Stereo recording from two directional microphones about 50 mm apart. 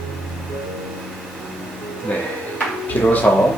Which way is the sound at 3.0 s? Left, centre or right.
Left.